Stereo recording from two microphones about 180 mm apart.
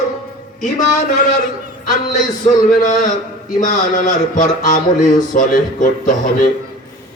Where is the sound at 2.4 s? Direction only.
45° left (ahead or behind).